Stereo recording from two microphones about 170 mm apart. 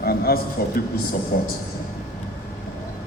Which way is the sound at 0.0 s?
65° left (ahead or behind).